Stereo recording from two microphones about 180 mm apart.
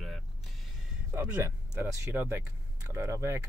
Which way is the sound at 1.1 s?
10° right (ahead or behind).